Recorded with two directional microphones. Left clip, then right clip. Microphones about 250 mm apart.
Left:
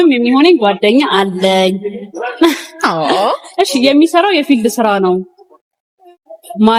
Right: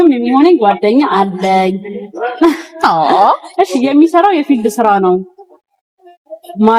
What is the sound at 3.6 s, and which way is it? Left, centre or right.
A woman's voice, left.